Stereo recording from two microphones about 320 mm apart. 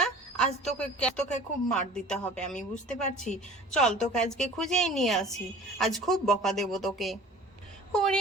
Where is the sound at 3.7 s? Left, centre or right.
Centre.